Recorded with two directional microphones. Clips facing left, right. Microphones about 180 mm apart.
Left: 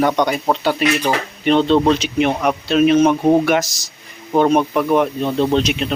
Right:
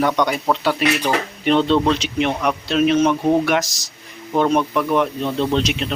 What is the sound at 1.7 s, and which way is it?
Speech, 35° left (ahead or behind).